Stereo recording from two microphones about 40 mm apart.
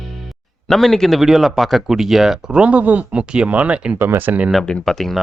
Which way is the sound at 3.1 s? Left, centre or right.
Right.